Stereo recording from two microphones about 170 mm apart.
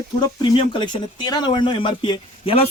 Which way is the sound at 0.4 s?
30° left (ahead or behind).